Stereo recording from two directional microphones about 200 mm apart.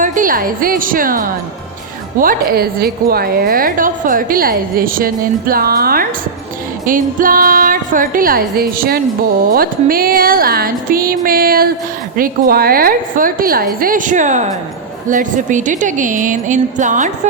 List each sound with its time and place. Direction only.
0.0 s a woman's voice: 40° right (ahead or behind)